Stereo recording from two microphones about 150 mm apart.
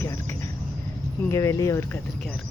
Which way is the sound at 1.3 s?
20° left (ahead or behind).